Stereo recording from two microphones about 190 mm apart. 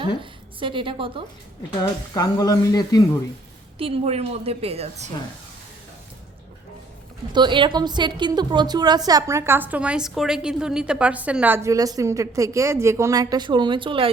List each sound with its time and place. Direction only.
0.2 s a woman's voice: 25° right (ahead or behind)
2.1 s speech: 20° left (ahead or behind)
3.8 s a woman's voice: 30° right (ahead or behind)
7.3 s a woman's voice: 25° right (ahead or behind)